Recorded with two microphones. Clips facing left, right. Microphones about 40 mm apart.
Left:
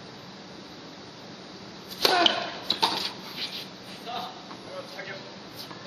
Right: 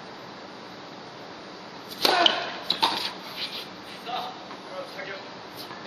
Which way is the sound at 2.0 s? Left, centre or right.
Centre.